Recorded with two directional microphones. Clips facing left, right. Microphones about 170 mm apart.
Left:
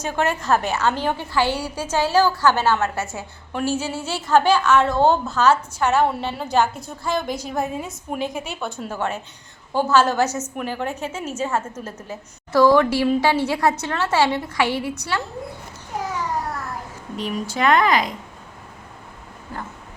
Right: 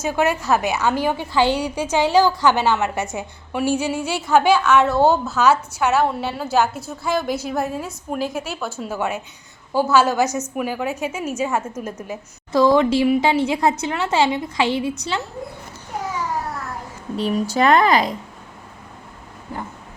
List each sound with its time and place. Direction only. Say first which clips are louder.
0.0 s a woman's voice: right 3 dB; 10° right (ahead or behind)
17.2 s speech: right 5 dB; 35° right (ahead or behind)